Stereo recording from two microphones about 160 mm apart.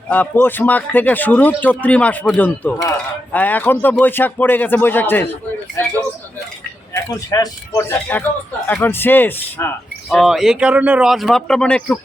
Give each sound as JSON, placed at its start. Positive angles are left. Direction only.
{"t": 0.1, "sound": "a man's voice", "side_deg": 10}
{"t": 10.1, "sound": "speech", "side_deg": 0}